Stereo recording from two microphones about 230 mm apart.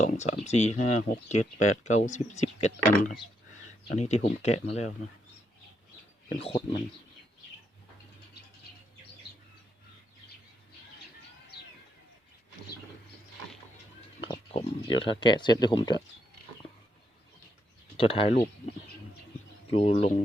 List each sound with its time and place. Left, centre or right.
0.0 s speech: left
6.2 s speech: left
14.5 s speech: left
17.9 s speech: left
19.7 s speech: left